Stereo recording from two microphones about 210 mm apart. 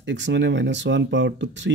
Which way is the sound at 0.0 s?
60° right (ahead or behind).